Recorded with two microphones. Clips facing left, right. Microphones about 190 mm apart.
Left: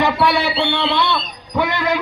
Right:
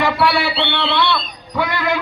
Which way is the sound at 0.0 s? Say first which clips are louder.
Even; 20° left (ahead or behind).